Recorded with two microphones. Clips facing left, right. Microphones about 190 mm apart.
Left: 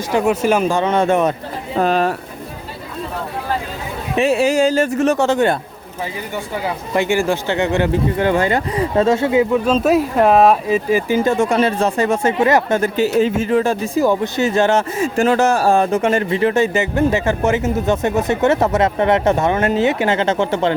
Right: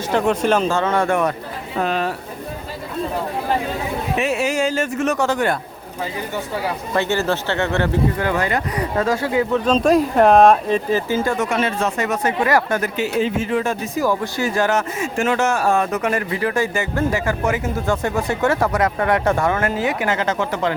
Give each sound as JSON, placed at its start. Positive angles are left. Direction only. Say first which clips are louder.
{"t": 0.1, "sound": "speech", "louder": "left 2 dB", "side_deg": 10}
{"t": 1.7, "sound": "speech", "louder": "left 5 dB", "side_deg": 40}
{"t": 4.2, "sound": "speech", "louder": "left 7 dB", "side_deg": 30}
{"t": 6.9, "sound": "speech", "louder": "left 3 dB", "side_deg": 15}
{"t": 8.2, "sound": "speech", "louder": "left 4 dB", "side_deg": 25}
{"t": 9.6, "sound": "speech", "louder": "left 1 dB", "side_deg": 5}
{"t": 13.1, "sound": "speech", "louder": "left 3 dB", "side_deg": 45}